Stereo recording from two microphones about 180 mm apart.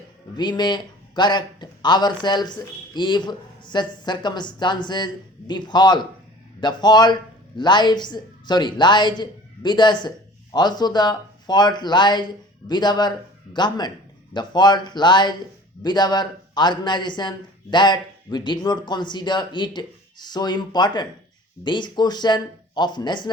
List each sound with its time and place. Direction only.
0.3 s a man's voice: 25° left (ahead or behind)